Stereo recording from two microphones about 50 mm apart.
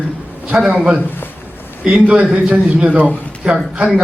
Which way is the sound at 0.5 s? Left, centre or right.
Centre.